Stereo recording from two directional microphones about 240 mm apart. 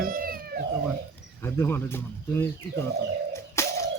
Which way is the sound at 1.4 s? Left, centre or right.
Centre.